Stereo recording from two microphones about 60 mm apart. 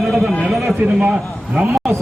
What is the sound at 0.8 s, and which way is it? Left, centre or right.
Speech, centre.